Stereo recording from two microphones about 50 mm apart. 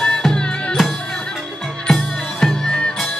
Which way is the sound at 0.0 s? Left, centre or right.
Centre.